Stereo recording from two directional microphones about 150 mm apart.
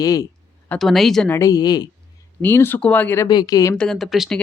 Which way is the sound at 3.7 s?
5° left (ahead or behind).